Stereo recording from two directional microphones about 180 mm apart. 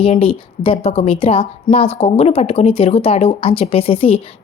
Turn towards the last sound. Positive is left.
turn(degrees=30)  # may be behind; listen again after turning